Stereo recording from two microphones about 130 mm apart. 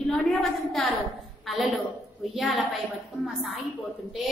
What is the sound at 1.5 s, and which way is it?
A woman's voice, centre (ahead or behind).